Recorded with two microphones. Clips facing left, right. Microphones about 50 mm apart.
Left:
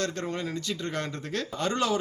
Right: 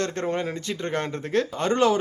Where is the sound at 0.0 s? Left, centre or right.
Right.